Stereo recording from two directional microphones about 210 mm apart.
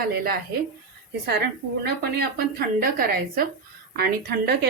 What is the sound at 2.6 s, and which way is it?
Speech, 45° right (ahead or behind).